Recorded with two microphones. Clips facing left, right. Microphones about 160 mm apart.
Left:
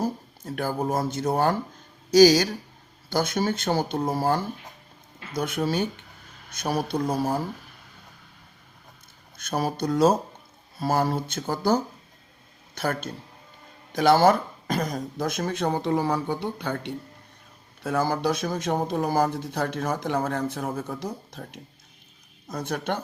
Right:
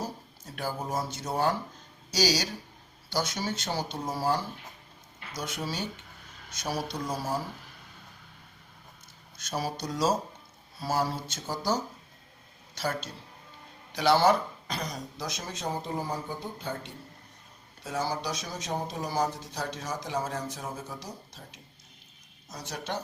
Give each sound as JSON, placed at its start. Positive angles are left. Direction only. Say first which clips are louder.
{"t": 0.0, "sound": "speech", "louder": "left 9 dB", "side_deg": 55}
{"t": 9.4, "sound": "speech", "louder": "left 6 dB", "side_deg": 55}
{"t": 17.8, "sound": "speech", "louder": "left 8 dB", "side_deg": 55}